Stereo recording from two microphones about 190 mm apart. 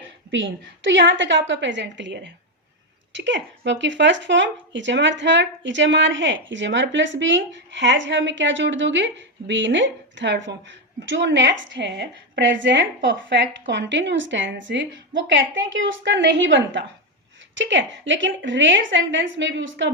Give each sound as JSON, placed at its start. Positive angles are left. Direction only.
{"t": 0.3, "sound": "speech", "side_deg": -75}